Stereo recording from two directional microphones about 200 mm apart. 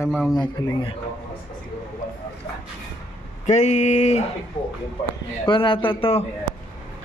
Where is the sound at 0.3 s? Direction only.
20° left (ahead or behind).